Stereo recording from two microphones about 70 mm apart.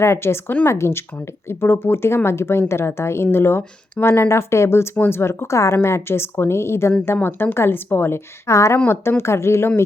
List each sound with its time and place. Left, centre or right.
0.0 s speech: left
7.2 s speech: left